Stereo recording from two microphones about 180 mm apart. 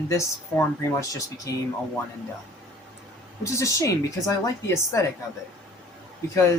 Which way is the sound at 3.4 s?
15° left (ahead or behind).